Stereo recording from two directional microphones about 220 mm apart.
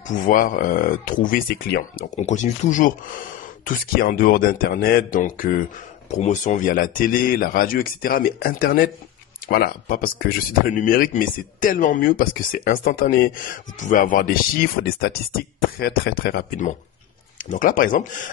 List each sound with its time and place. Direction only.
0.0 s speech: 35° left (ahead or behind)